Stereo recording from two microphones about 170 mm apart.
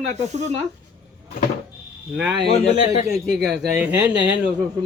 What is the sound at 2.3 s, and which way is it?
Speech, 75° right (ahead or behind).